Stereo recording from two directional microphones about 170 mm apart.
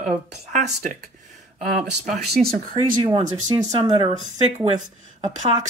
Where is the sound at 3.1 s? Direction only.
25° right (ahead or behind).